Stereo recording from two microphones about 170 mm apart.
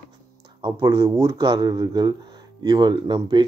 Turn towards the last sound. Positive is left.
turn(degrees=-25)  # may be behind; listen again after turning